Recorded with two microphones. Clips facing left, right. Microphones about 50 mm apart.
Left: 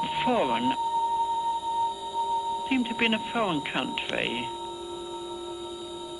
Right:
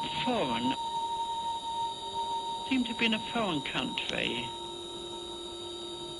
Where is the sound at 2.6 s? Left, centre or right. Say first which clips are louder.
Left 4 dB; left.